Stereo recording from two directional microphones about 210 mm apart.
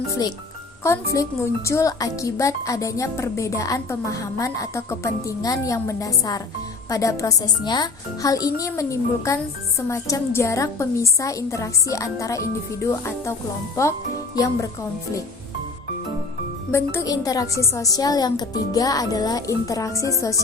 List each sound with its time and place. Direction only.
1.1 s speech: 15° left (ahead or behind)
14.3 s speech: 15° left (ahead or behind)
16.7 s speech: 15° left (ahead or behind)